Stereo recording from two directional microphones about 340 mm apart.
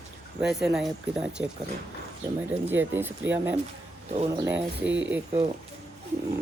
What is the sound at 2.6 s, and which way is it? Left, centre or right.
Speech, centre.